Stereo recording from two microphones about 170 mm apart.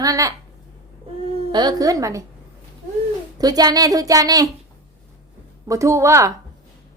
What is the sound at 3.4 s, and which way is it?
Speech, 20° right (ahead or behind).